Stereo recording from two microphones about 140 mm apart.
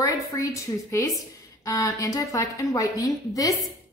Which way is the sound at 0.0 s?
20° left (ahead or behind).